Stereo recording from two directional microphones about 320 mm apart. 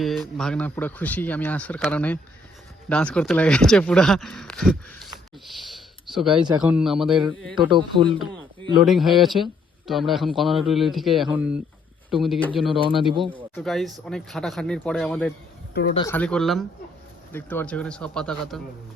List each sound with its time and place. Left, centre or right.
0.0 s speech: centre
7.5 s speech: centre
8.9 s speech: centre
12.7 s speech: centre
13.3 s speech: centre